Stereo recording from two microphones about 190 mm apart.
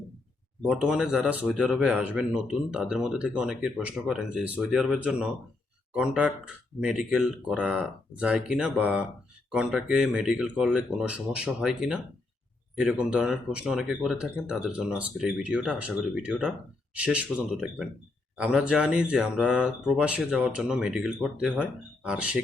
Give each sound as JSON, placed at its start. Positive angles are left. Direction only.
{"t": 0.7, "sound": "speech", "side_deg": -5}